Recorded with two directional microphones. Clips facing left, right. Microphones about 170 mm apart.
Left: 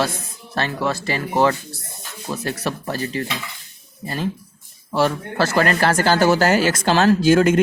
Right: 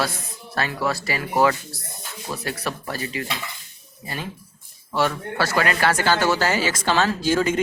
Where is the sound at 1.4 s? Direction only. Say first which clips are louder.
Left 1 dB; 25° left (ahead or behind).